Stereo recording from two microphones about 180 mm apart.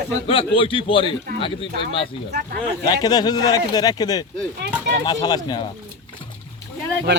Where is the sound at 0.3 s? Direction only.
30° left (ahead or behind).